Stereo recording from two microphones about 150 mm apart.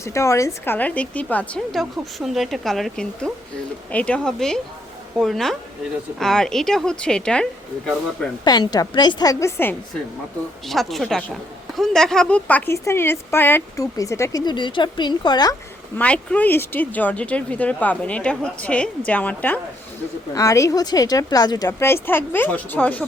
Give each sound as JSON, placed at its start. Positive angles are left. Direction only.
{"t": 0.0, "sound": "a woman's voice", "side_deg": 20}
{"t": 8.4, "sound": "speech", "side_deg": 25}
{"t": 10.7, "sound": "a woman's voice", "side_deg": 0}
{"t": 16.0, "sound": "speech", "side_deg": 10}
{"t": 20.3, "sound": "speech", "side_deg": 20}
{"t": 21.7, "sound": "speech", "side_deg": 15}